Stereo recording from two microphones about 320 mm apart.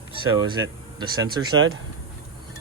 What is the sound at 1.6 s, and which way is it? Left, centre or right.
Speech, right.